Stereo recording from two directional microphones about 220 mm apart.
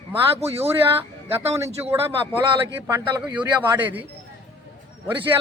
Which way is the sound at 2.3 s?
10° right (ahead or behind).